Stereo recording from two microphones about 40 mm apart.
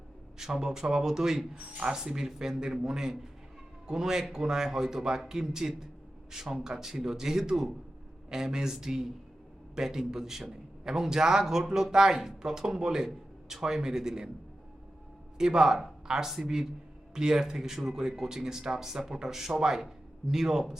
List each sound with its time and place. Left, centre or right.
0.3 s a man's voice: centre
15.4 s a man's voice: centre